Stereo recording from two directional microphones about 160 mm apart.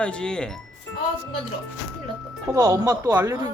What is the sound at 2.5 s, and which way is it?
Speech, 20° right (ahead or behind).